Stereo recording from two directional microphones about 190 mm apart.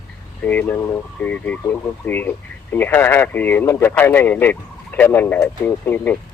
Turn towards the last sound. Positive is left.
turn(degrees=10)  # may be behind; listen again after turning